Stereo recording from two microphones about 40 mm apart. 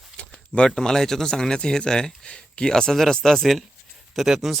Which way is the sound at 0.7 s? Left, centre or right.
Centre.